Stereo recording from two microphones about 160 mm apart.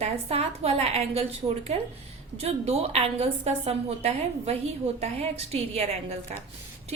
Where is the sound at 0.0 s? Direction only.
40° right (ahead or behind).